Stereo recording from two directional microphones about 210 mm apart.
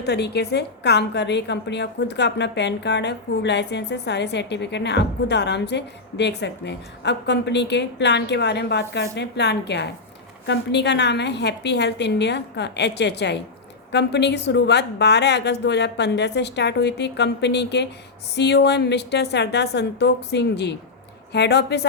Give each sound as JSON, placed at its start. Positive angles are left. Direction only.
{"t": 0.0, "sound": "a woman's voice", "side_deg": 50}